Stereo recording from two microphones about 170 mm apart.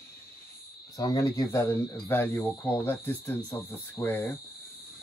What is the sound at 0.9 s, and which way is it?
Speech, 20° left (ahead or behind).